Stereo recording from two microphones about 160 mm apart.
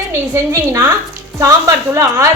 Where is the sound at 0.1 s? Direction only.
15° right (ahead or behind).